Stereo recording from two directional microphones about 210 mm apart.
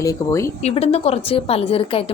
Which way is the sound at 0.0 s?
15° left (ahead or behind).